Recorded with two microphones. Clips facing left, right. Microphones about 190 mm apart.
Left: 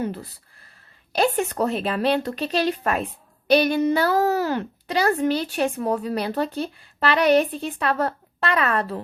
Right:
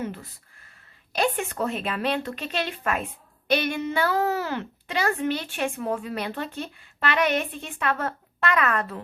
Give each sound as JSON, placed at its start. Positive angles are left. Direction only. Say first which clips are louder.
{"t": 0.0, "sound": "speech", "louder": "left 5 dB", "side_deg": 35}